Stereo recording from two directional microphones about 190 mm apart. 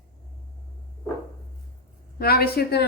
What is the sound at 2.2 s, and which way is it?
Speech, 55° left (ahead or behind).